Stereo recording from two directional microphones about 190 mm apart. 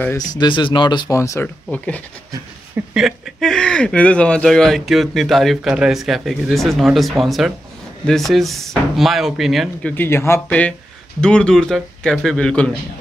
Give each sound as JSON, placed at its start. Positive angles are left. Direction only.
{"t": 0.3, "sound": "speech", "side_deg": 25}
{"t": 2.7, "sound": "speech", "side_deg": -5}
{"t": 9.9, "sound": "speech", "side_deg": 15}